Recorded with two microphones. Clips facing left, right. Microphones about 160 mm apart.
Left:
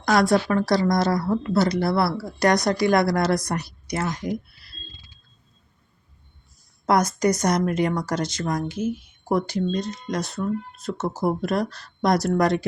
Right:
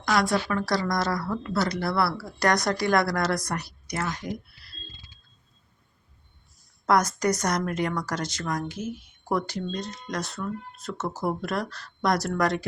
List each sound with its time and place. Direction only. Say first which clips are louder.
0.0 s speech: left 5 dB; 40° left (ahead or behind)
0.7 s speech: left 6 dB; 25° left (ahead or behind)
6.8 s speech: left 3 dB; 15° left (ahead or behind)